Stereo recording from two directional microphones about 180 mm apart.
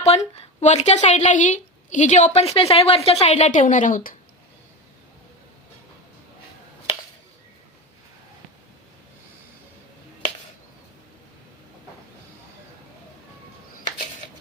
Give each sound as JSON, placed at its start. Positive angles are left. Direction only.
{"t": 0.0, "sound": "speech", "side_deg": 35}